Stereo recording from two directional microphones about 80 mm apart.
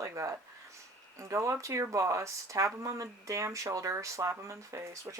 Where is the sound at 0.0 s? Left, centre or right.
Right.